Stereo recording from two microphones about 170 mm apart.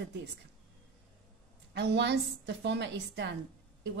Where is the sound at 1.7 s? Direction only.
90° right.